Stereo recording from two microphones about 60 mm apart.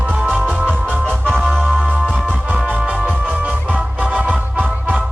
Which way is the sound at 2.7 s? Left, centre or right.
Right.